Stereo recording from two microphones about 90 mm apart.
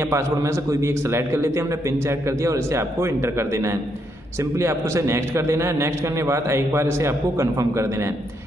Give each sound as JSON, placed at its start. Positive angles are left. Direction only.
{"t": 0.0, "sound": "a man's voice", "side_deg": -35}